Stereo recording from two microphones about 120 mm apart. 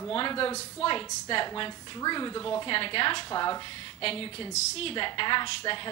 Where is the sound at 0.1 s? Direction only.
45° left (ahead or behind).